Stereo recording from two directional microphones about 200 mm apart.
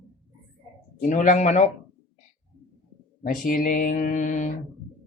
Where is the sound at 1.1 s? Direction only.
40° left (ahead or behind).